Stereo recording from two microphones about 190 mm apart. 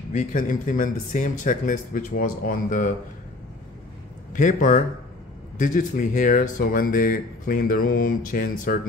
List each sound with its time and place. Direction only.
0.1 s speech: 45° left (ahead or behind)
4.3 s a man's voice: 45° left (ahead or behind)